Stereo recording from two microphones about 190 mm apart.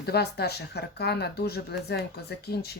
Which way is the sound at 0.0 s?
55° left (ahead or behind).